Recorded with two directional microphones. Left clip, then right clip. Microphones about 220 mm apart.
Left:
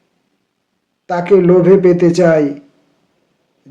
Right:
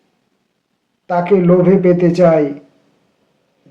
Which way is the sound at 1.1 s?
40° left (ahead or behind).